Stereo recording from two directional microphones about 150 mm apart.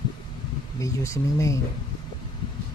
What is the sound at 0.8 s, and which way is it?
Speech, 20° left (ahead or behind).